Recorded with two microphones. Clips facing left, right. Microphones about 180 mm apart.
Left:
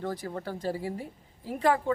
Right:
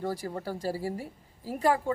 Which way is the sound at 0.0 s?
10° right (ahead or behind).